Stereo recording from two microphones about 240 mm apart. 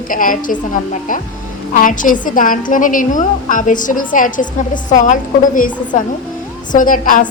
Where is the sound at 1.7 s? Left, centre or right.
Left.